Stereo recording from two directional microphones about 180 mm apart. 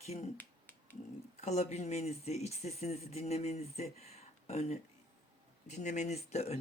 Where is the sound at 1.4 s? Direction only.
35° left (ahead or behind).